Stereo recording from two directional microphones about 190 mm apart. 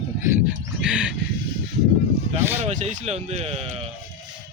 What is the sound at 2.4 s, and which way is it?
Speech, 10° right (ahead or behind).